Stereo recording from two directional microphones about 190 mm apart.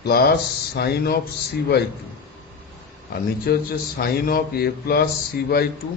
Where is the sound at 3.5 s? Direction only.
55° left (ahead or behind).